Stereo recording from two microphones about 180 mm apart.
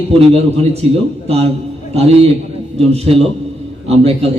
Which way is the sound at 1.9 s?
35° right (ahead or behind).